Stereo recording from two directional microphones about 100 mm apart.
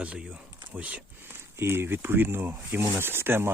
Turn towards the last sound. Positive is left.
turn(degrees=-25)  # may be behind; listen again after turning